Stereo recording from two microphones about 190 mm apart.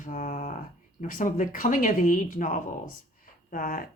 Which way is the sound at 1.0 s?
45° left (ahead or behind).